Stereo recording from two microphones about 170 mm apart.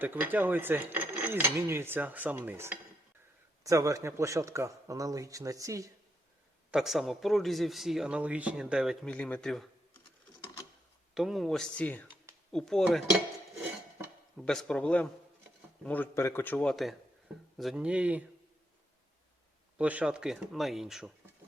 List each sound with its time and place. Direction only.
0.0 s a man's voice: 10° right (ahead or behind)
6.7 s speech: centre (ahead or behind)
11.1 s speech: centre (ahead or behind)
14.3 s a man's voice: 5° left (ahead or behind)
19.8 s speech: 10° right (ahead or behind)